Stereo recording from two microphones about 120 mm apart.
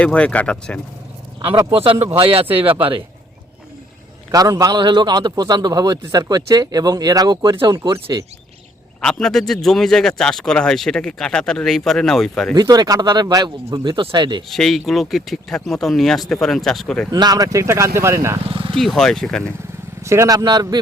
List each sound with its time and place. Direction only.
0.0 s speech: 10° left (ahead or behind)
1.7 s speech: 50° right (ahead or behind)
4.3 s a man's voice: 30° right (ahead or behind)
9.0 s a man's voice: 5° left (ahead or behind)
12.5 s a man's voice: 35° right (ahead or behind)
14.5 s a man's voice: centre (ahead or behind)
17.1 s speech: 35° right (ahead or behind)
18.4 s vehicle: 50° right (ahead or behind)
18.7 s a man's voice: 5° left (ahead or behind)
20.0 s a man's voice: 25° right (ahead or behind)